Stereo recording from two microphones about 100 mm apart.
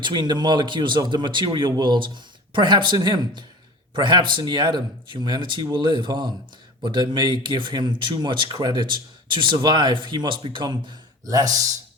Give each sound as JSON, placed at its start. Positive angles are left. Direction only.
{"t": 0.0, "sound": "speech", "side_deg": -50}
{"t": 11.3, "sound": "speech", "side_deg": -35}